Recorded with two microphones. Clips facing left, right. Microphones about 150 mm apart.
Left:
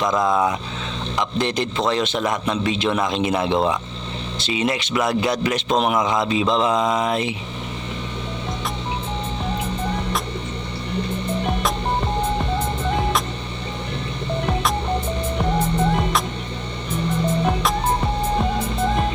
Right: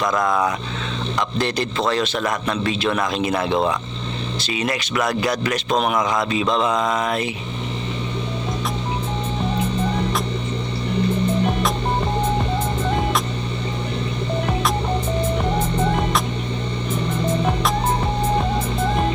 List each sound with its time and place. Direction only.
1.4 s speech: 20° left (ahead or behind)